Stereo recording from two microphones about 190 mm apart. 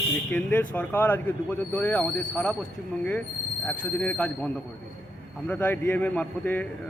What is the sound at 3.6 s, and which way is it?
Speech, 5° left (ahead or behind).